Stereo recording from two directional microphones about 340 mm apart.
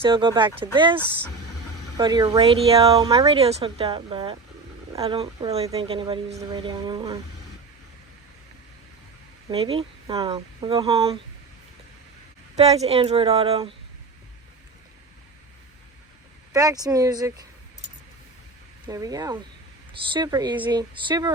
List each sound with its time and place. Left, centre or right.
0.0 s speech: centre
2.0 s speech: centre
9.5 s speech: centre
12.5 s speech: centre
16.5 s speech: centre
18.9 s speech: centre